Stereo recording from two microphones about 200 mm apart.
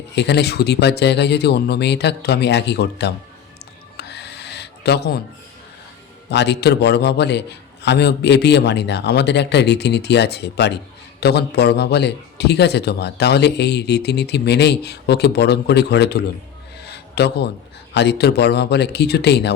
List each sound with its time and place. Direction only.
0.2 s a man's voice: 55° left (ahead or behind)
3.9 s owl: 55° left (ahead or behind)
6.3 s a man's voice: 60° left (ahead or behind)
16.8 s a sound: 55° left (ahead or behind)
17.9 s a man's voice: 55° left (ahead or behind)